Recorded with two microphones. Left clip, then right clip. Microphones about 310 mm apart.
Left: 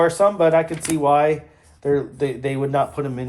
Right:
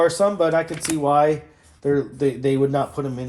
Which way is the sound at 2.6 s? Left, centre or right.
Centre.